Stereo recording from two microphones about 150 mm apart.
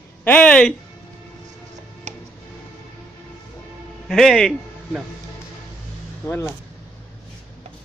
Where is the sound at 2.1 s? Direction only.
50° right (ahead or behind).